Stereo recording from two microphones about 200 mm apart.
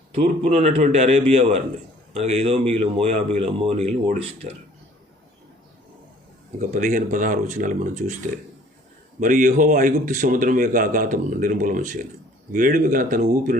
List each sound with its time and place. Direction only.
0.1 s speech: 30° right (ahead or behind)
6.6 s speech: 40° right (ahead or behind)
9.2 s speech: 40° right (ahead or behind)